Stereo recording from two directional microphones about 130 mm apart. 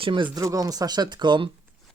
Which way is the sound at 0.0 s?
40° right (ahead or behind).